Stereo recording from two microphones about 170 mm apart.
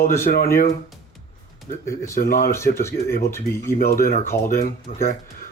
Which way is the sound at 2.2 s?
60° left (ahead or behind).